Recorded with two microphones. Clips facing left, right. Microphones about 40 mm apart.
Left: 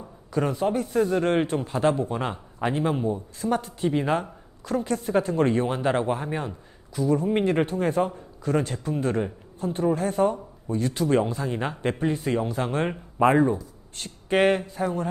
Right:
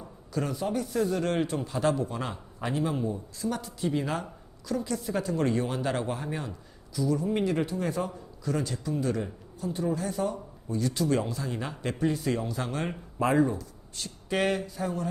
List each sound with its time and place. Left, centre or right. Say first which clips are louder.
0.3 s speech: left 6 dB; left